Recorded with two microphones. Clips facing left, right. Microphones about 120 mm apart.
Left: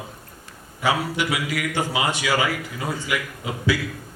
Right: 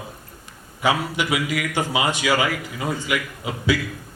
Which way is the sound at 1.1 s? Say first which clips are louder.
Right 2 dB; 15° right (ahead or behind).